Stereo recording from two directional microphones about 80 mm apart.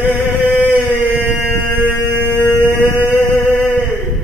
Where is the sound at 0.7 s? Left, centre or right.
Right.